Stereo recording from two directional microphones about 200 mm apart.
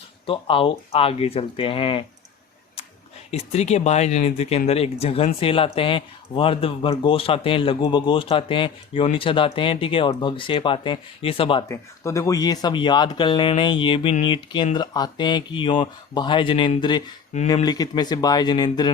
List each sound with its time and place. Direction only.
0.3 s speech: 25° left (ahead or behind)
3.3 s speech: 30° left (ahead or behind)
11.7 s speech: 15° left (ahead or behind)